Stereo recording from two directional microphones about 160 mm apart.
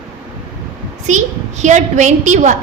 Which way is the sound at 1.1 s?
50° right (ahead or behind).